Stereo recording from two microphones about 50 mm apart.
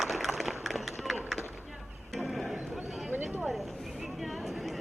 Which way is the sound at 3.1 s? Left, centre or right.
Right.